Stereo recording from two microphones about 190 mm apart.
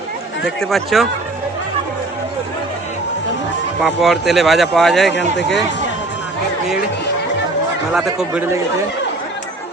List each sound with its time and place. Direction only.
0.4 s speech: centre (ahead or behind)
3.8 s speech: centre (ahead or behind)
5.1 s speech: 65° left (ahead or behind)
8.2 s speech: 5° right (ahead or behind)